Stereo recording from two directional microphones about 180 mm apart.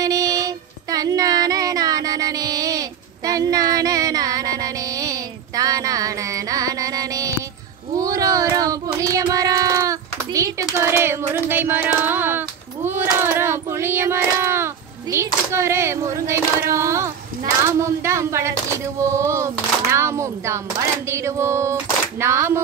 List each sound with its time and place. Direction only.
0.0 s a sound: 20° right (ahead or behind)
7.9 s child singing: 20° right (ahead or behind)
16.7 s speech: 15° right (ahead or behind)